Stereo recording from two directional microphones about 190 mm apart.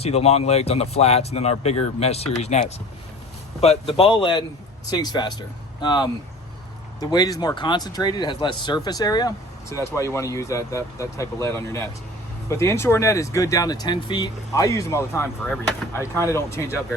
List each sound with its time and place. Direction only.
0.0 s speech: 35° left (ahead or behind); by 16.7 s 15° left (ahead or behind)